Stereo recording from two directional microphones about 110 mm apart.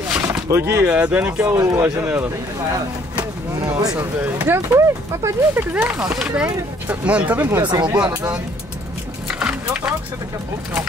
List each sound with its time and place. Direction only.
0.1 s a sound: 25° right (ahead or behind)
0.8 s speech: 10° right (ahead or behind)
3.2 s speech: 40° right (ahead or behind)
4.2 s speech: 15° right (ahead or behind)
5.7 s speech: 15° right (ahead or behind)
7.6 s speech: 45° right (ahead or behind)
7.9 s speech: 15° right (ahead or behind)
9.3 s vehicle: 10° right (ahead or behind)